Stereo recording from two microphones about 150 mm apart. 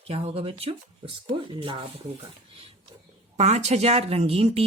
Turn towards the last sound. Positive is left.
turn(degrees=-45)  # may be behind; listen again after turning